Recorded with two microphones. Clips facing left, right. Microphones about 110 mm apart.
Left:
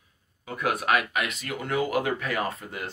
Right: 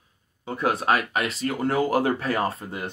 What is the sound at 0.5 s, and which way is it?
Speech, 30° right (ahead or behind).